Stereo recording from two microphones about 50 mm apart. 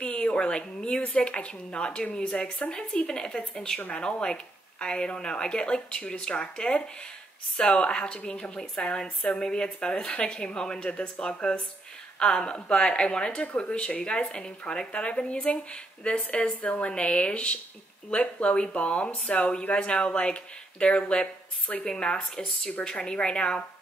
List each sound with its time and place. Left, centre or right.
0.0 s speech: centre